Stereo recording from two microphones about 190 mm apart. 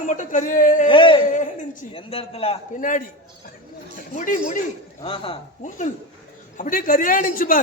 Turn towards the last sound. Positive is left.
turn(degrees=45)  # may be behind; listen again after turning